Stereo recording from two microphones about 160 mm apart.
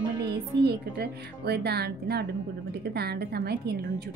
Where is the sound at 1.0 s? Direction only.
90° right.